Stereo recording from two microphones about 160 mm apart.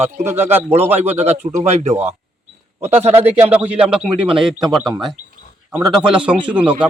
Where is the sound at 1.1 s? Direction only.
40° right (ahead or behind).